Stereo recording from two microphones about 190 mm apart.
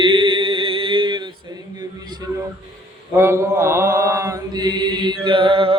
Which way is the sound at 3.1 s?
15° right (ahead or behind).